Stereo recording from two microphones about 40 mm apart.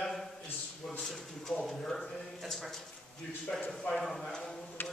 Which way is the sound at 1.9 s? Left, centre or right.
Centre.